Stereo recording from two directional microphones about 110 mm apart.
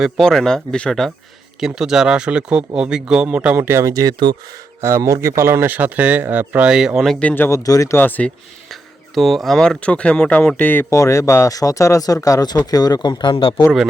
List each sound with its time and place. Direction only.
0.0 s speech: 5° left (ahead or behind)
7.2 s speech: 15° left (ahead or behind)
7.6 s speech: 30° left (ahead or behind)
7.9 s speech: 15° left (ahead or behind)
8.7 s speech: centre (ahead or behind); by 10.9 s 15° left (ahead or behind)
10.9 s speech: 30° left (ahead or behind)
13.3 s speech: 55° left (ahead or behind)